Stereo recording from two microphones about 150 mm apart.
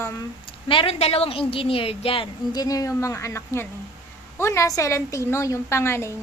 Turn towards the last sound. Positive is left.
turn(degrees=15)  # may be behind; listen again after turning